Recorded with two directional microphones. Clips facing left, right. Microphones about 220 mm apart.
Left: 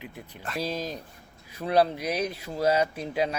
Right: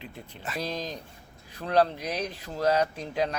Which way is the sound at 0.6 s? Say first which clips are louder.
Left 3 dB; 5° left (ahead or behind).